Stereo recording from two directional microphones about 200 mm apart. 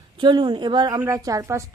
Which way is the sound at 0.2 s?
25° right (ahead or behind).